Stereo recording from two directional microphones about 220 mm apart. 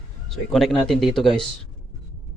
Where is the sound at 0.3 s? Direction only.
Centre (ahead or behind).